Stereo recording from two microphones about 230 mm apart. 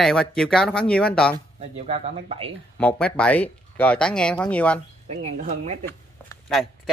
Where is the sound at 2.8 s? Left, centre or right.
Centre.